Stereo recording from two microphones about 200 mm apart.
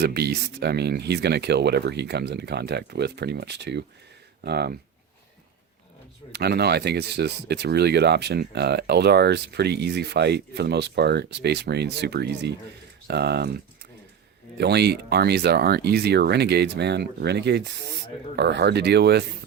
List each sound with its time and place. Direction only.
0.0 s speech: 50° right (ahead or behind)
6.3 s speech: 55° right (ahead or behind)
14.6 s speech: 55° right (ahead or behind)